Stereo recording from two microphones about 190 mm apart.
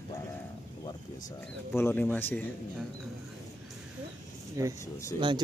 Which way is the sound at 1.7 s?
10° left (ahead or behind).